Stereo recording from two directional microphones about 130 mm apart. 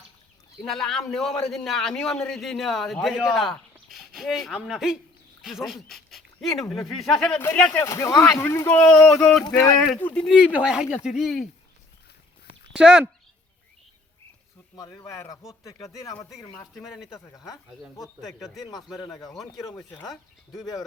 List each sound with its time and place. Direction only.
0.6 s a man's voice: 5° left (ahead or behind)
7.8 s a man's voice: 25° left (ahead or behind)
10.2 s a man's voice: 5° right (ahead or behind)
12.7 s speech: 5° right (ahead or behind)
14.8 s speech: 25° left (ahead or behind)
16.7 s a man's voice: centre (ahead or behind)
17.2 s speech: 25° left (ahead or behind)
18.3 s a man's voice: centre (ahead or behind)
19.7 s speech: 15° left (ahead or behind)